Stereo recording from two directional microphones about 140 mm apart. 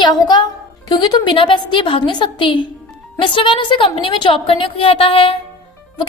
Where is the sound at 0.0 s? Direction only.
30° left (ahead or behind).